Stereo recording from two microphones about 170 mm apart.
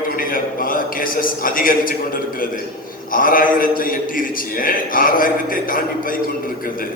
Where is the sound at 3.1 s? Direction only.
55° left (ahead or behind).